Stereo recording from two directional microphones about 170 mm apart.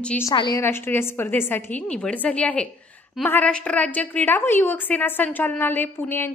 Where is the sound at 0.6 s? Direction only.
15° left (ahead or behind).